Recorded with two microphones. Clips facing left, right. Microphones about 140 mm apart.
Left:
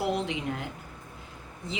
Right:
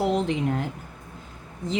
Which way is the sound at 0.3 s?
45° right (ahead or behind).